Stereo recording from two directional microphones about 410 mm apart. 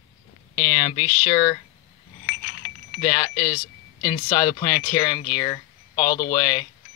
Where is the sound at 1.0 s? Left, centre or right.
Centre.